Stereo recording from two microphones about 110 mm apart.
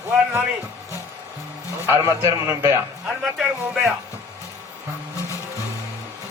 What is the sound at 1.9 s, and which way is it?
Speech, 25° right (ahead or behind).